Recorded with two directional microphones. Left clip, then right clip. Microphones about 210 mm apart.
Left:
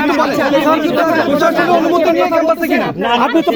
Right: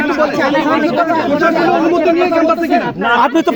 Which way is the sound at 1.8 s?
60° left (ahead or behind).